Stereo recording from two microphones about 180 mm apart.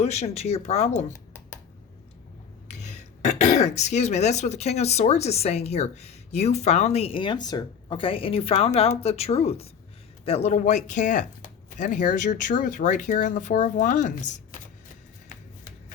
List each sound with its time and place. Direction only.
0.0 s speech: 35° left (ahead or behind)
1.1 s a sound: 15° left (ahead or behind)
2.6 s speech: 40° left (ahead or behind)